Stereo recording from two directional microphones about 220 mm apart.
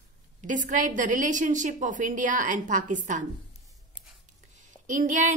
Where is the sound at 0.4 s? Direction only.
35° right (ahead or behind).